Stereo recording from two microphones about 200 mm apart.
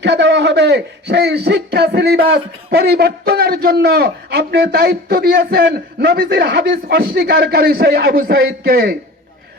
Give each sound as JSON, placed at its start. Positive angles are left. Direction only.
{"t": 0.0, "sound": "a man's voice", "side_deg": -60}